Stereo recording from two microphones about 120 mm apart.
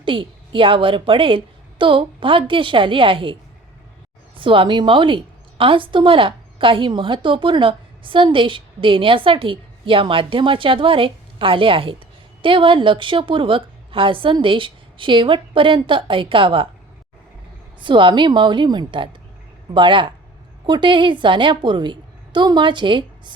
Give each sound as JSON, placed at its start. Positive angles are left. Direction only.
{"t": 0.0, "sound": "a woman's voice", "side_deg": -45}
{"t": 4.4, "sound": "a woman's voice", "side_deg": -45}
{"t": 17.7, "sound": "a woman's voice", "side_deg": -40}